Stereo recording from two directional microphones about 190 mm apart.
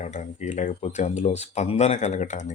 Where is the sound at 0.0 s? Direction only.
40° left (ahead or behind).